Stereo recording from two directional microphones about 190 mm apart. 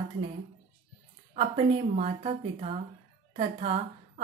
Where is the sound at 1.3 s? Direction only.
35° right (ahead or behind).